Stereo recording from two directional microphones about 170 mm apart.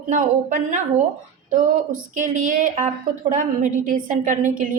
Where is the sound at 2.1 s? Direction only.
50° right (ahead or behind).